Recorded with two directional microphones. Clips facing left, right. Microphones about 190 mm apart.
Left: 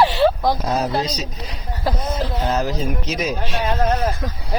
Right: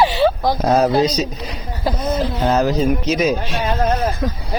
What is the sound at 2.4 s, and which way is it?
Speech, 70° right (ahead or behind).